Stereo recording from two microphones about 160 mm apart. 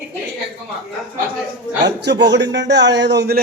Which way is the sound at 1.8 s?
90° right.